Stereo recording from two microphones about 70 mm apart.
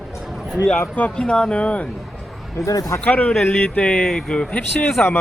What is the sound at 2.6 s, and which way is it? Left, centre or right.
Speech, left.